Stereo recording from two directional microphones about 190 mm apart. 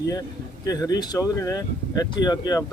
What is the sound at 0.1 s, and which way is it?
Speech, 20° left (ahead or behind).